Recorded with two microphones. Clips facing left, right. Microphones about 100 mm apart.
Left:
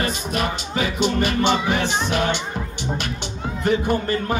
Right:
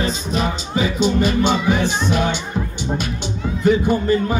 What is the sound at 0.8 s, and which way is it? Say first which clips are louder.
Music: right 3 dB; centre (ahead or behind).